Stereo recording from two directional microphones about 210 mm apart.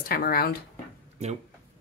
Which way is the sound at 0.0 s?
45° left (ahead or behind).